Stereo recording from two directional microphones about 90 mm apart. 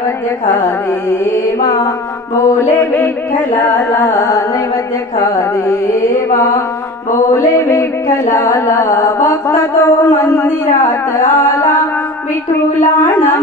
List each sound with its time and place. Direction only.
1.6 s mantra: 45° left (ahead or behind)
2.7 s singing: 25° left (ahead or behind)
5.2 s music: 40° left (ahead or behind)
8.3 s mantra: 30° left (ahead or behind)
10.3 s singing: 30° left (ahead or behind)
12.7 s singing: 25° left (ahead or behind)